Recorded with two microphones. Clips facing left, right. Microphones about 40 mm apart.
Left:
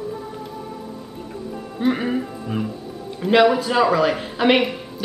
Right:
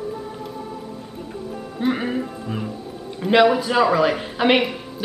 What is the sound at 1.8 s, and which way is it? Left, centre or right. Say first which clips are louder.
A woman's voice: left 1 dB; centre.